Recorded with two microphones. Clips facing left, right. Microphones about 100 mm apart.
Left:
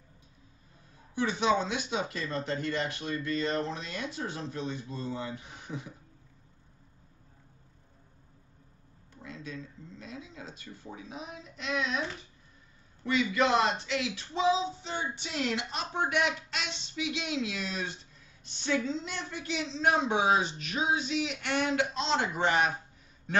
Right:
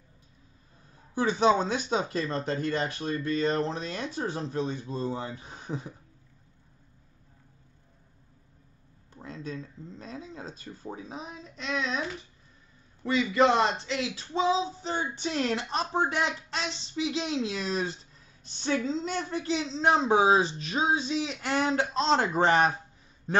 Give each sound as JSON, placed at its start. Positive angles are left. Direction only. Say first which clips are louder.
{"t": 1.1, "sound": "speech", "louder": "right 4 dB", "side_deg": -40}
{"t": 9.1, "sound": "speech", "louder": "right 4 dB", "side_deg": -40}
{"t": 13.0, "sound": "speech", "louder": "right 4 dB", "side_deg": -30}